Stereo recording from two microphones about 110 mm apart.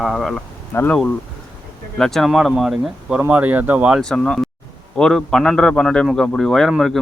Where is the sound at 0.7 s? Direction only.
25° left (ahead or behind).